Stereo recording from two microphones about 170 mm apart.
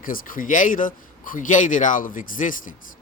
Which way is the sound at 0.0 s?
55° left (ahead or behind).